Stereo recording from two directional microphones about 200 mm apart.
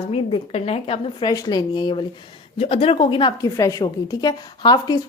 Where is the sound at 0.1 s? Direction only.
30° left (ahead or behind).